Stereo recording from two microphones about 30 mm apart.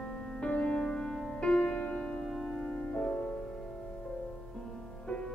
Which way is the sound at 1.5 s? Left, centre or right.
Left.